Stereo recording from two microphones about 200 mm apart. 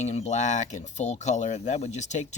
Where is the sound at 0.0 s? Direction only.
35° left (ahead or behind).